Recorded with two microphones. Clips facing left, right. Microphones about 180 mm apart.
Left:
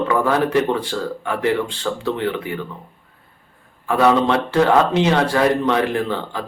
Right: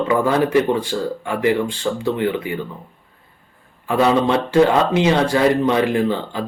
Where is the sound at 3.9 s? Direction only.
15° right (ahead or behind).